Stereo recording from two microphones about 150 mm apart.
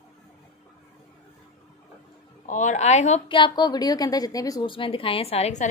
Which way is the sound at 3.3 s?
30° left (ahead or behind).